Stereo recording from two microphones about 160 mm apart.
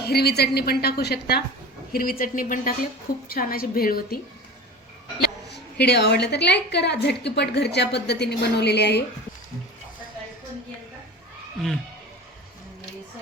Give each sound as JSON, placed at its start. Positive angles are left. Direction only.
{"t": 0.0, "sound": "a woman's voice", "side_deg": 80}
{"t": 1.9, "sound": "a woman's voice", "side_deg": 65}
{"t": 5.2, "sound": "a woman's voice", "side_deg": 90}